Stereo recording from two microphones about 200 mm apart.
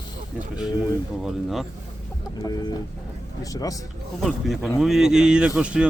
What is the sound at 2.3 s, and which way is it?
Speech, 20° left (ahead or behind).